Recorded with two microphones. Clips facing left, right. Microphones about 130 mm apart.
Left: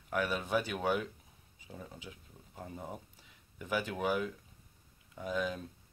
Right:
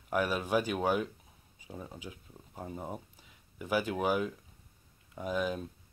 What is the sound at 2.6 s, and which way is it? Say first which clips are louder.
Speech: right 4 dB; 25° right (ahead or behind).